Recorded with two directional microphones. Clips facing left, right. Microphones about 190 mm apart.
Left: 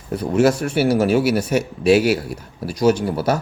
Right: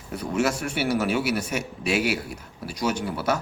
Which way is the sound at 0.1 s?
35° left (ahead or behind).